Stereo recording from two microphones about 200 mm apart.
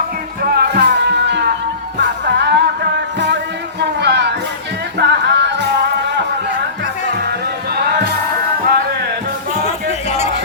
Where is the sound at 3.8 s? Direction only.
60° right (ahead or behind).